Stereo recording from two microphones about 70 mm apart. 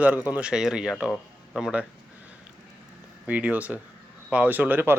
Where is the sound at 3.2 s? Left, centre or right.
Right.